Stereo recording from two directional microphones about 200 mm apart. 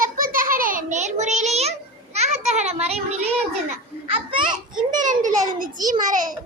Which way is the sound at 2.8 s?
30° right (ahead or behind).